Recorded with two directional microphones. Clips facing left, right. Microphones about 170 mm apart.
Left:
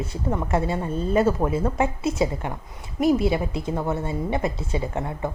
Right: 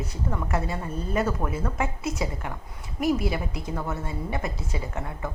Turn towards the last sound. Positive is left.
turn(degrees=25)  # may be behind; listen again after turning